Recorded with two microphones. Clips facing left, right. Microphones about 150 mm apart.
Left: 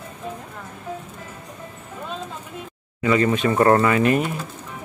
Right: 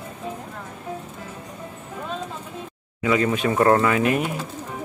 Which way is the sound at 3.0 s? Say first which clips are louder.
Left 2 dB; centre (ahead or behind).